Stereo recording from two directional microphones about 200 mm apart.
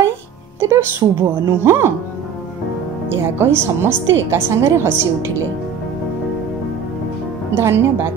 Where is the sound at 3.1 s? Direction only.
10° right (ahead or behind).